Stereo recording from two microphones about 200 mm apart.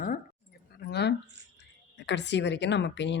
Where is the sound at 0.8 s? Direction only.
55° left (ahead or behind).